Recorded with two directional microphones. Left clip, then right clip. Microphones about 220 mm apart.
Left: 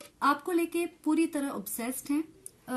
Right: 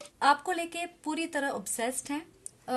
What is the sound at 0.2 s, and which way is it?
A woman's voice, 35° right (ahead or behind).